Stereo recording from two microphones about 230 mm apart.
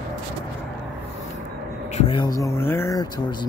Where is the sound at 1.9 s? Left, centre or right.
Left.